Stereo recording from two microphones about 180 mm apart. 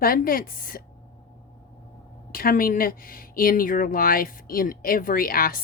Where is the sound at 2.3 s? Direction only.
55° left (ahead or behind).